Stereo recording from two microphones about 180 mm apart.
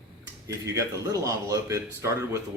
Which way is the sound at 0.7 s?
15° right (ahead or behind).